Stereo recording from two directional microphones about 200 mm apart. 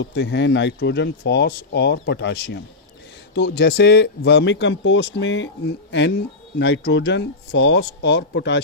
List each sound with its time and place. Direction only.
0.0 s speech: 60° left (ahead or behind)